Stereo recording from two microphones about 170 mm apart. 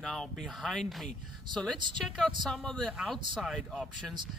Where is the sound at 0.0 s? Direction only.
Centre (ahead or behind).